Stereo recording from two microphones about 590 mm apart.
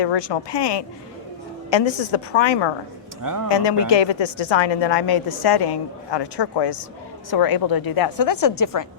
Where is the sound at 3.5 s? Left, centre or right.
Left.